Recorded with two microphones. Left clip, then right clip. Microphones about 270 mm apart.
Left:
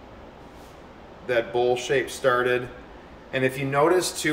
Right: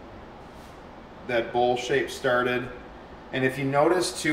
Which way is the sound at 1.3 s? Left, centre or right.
Centre.